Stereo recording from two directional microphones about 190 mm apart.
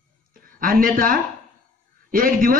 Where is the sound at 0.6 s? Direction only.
50° right (ahead or behind).